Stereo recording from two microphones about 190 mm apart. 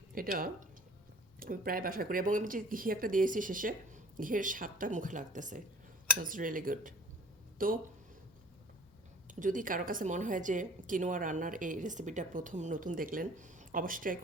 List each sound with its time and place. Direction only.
0.1 s a woman's voice: 50° right (ahead or behind)
9.3 s a woman's voice: 45° right (ahead or behind)